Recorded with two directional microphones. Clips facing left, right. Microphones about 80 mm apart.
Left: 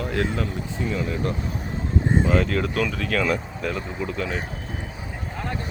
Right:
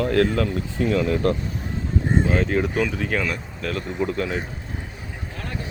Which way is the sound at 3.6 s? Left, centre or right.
Centre.